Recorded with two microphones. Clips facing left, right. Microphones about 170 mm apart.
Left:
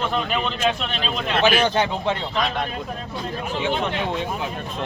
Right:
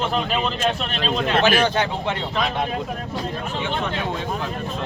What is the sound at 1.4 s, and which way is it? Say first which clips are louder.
Speech: left 3 dB; 15° left (ahead or behind).